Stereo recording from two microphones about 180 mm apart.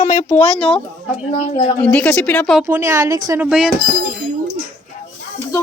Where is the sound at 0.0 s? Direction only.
45° left (ahead or behind).